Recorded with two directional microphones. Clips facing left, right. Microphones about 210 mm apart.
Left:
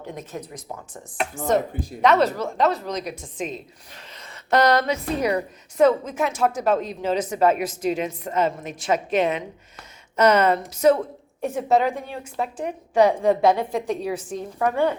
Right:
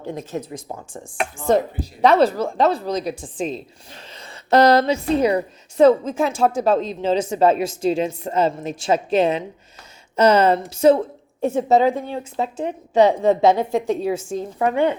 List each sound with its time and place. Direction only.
0.0 s a woman's voice: 30° right (ahead or behind)